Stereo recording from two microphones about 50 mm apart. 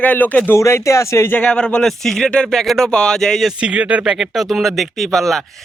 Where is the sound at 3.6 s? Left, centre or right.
Right.